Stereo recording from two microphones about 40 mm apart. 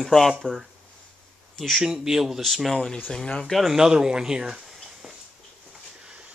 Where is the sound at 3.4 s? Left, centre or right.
Centre.